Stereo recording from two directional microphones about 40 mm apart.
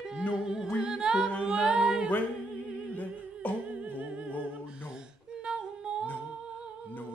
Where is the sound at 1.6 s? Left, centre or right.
Right.